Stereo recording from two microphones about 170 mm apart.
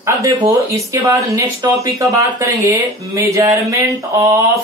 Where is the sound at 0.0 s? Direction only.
20° right (ahead or behind).